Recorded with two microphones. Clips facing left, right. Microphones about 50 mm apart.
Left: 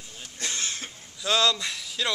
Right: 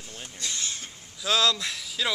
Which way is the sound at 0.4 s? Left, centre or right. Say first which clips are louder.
Left 2 dB; left.